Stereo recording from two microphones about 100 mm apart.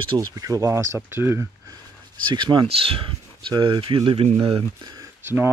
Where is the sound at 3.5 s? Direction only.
50° right (ahead or behind); by 4.6 s 70° right (ahead or behind).